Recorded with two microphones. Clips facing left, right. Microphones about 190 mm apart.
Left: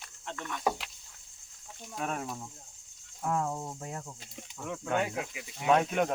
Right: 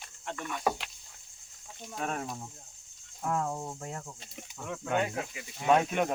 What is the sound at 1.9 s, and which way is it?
Speech, centre (ahead or behind).